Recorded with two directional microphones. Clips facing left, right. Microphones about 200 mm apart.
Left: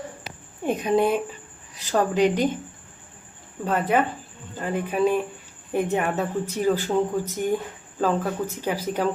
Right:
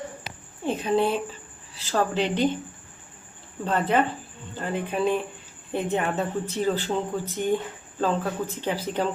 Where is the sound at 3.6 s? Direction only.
10° left (ahead or behind).